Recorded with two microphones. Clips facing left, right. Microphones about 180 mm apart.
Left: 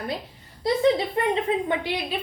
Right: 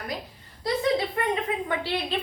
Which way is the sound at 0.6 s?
25° left (ahead or behind).